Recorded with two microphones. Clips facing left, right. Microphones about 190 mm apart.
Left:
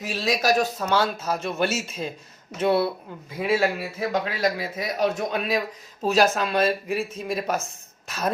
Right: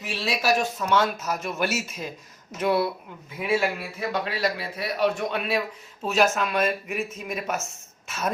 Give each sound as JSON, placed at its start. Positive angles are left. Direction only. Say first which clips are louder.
{"t": 0.0, "sound": "a man's voice", "louder": "left 3 dB", "side_deg": 40}